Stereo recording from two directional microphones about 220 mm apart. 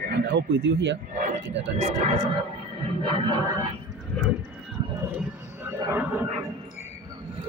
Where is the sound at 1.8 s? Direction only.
30° right (ahead or behind).